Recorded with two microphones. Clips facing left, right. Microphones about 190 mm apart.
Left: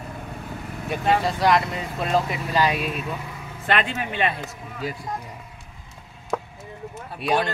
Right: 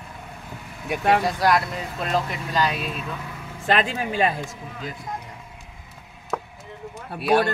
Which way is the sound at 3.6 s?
35° right (ahead or behind).